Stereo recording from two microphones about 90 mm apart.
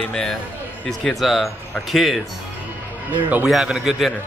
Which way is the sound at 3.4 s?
5° right (ahead or behind).